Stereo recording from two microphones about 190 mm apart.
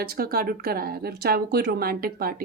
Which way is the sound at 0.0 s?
50° right (ahead or behind).